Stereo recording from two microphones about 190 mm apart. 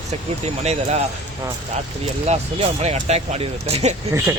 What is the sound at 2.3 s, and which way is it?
Speech, 35° right (ahead or behind).